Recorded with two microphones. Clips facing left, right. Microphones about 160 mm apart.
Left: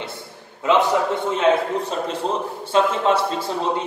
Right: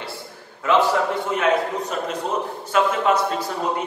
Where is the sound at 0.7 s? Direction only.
20° left (ahead or behind).